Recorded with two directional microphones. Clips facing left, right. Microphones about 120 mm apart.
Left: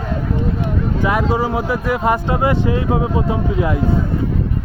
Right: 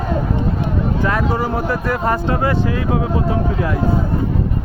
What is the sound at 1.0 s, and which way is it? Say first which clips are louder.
Speech: left 3 dB; 15° left (ahead or behind).